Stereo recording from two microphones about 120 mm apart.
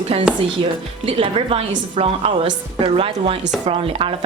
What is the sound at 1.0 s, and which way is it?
A woman's voice, 50° right (ahead or behind).